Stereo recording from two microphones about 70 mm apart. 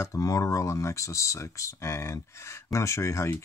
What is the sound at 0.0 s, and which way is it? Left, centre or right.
Speech, left.